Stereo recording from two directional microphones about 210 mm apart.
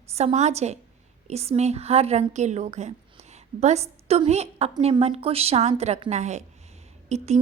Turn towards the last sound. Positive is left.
turn(degrees=-30)  # may be behind; listen again after turning